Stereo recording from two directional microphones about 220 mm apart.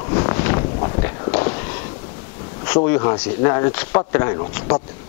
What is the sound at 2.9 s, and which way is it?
Speech, 20° left (ahead or behind).